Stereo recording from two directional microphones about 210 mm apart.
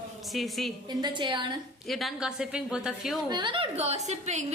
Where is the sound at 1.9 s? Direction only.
Centre (ahead or behind).